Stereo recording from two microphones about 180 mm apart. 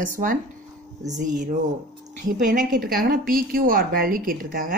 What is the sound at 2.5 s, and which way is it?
A woman's voice, 50° right (ahead or behind).